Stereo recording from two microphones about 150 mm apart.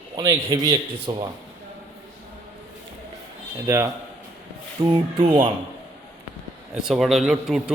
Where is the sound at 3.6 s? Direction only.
20° right (ahead or behind).